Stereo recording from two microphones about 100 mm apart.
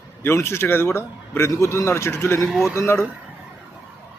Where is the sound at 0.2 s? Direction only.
25° left (ahead or behind).